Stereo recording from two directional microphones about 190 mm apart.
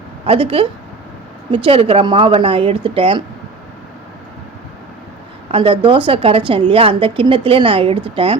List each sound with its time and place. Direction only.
0.3 s a woman's voice: 30° right (ahead or behind)
5.5 s a woman's voice: 25° right (ahead or behind)